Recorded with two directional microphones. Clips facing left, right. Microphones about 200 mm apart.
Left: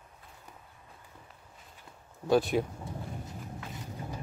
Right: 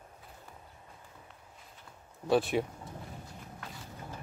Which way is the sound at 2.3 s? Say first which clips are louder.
Left 2 dB; centre (ahead or behind).